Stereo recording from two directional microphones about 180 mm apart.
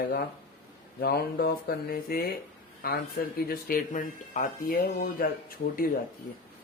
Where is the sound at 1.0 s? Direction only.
60° left (ahead or behind).